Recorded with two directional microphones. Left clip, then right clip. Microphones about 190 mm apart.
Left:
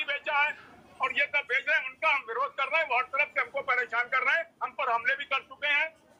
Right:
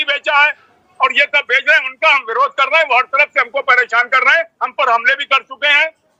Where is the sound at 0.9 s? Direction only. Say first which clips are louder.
Right 15 dB; 50° right (ahead or behind).